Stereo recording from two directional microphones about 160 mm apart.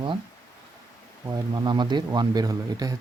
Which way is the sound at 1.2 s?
25° right (ahead or behind).